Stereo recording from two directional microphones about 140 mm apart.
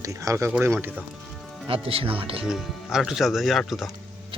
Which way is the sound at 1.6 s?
40° right (ahead or behind).